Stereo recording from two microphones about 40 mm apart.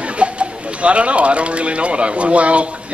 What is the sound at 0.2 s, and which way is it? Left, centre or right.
Speech, right.